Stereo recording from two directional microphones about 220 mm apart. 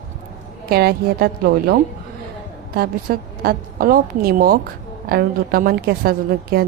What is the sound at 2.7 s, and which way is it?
A woman's voice, 40° right (ahead or behind).